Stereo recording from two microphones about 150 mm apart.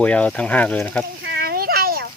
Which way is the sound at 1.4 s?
90° right.